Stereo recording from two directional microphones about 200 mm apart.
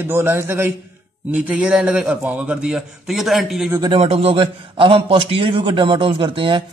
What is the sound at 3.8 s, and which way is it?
A man's voice, 25° right (ahead or behind).